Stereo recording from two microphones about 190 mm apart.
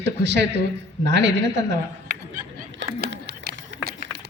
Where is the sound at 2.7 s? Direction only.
70° right (ahead or behind).